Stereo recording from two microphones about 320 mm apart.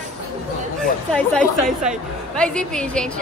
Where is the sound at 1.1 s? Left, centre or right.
Centre.